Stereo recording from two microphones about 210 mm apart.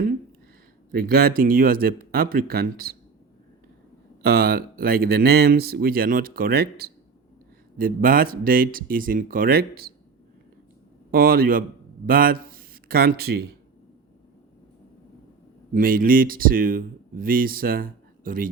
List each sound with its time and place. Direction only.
0.9 s speech: 45° right (ahead or behind)
4.2 s speech: 45° right (ahead or behind)
11.1 s a man's voice: 45° right (ahead or behind)
15.7 s speech: 40° right (ahead or behind)